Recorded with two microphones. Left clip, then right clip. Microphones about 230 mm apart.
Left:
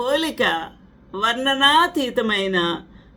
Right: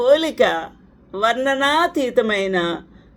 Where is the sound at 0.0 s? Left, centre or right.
Centre.